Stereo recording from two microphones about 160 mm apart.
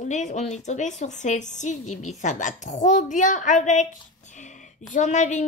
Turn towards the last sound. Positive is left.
turn(degrees=50)  # may be behind; listen again after turning